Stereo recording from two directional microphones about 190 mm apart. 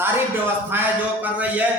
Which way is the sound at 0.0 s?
10° right (ahead or behind).